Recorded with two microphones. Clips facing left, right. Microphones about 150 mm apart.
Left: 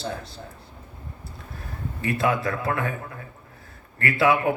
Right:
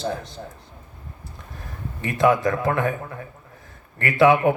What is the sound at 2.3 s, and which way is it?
Speech, 35° right (ahead or behind).